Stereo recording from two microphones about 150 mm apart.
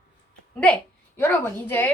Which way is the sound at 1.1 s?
15° left (ahead or behind).